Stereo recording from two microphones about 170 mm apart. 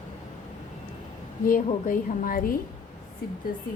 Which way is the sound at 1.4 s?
55° left (ahead or behind).